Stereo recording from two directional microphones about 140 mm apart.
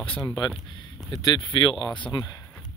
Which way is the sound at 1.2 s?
25° left (ahead or behind).